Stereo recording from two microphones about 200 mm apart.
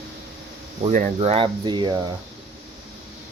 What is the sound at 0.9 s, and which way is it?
Speech, 35° right (ahead or behind).